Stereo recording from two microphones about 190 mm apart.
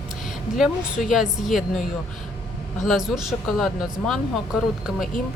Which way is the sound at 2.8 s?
Centre (ahead or behind).